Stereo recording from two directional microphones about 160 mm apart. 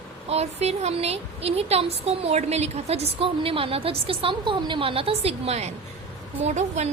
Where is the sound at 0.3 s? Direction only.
40° right (ahead or behind).